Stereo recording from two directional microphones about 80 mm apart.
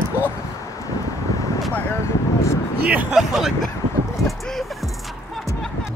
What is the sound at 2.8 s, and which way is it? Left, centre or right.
Speech, centre.